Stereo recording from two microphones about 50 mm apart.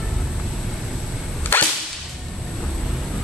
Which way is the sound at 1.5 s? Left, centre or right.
Left.